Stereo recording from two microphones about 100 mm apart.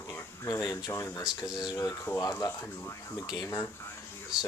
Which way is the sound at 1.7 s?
30° left (ahead or behind).